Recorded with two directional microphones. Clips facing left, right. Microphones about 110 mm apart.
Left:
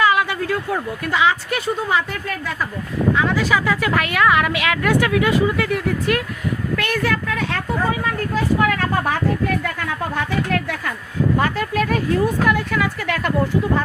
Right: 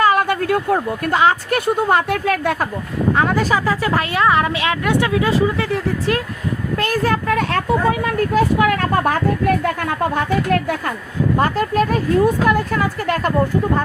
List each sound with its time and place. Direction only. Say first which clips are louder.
0.0 s speech: right 2 dB; 45° right (ahead or behind); by 2.6 s 65° right (ahead or behind)
3.2 s a woman's voice: right 2 dB; 45° right (ahead or behind)
7.3 s a woman's voice: right 6 dB; 55° right (ahead or behind); by 13.3 s 40° right (ahead or behind)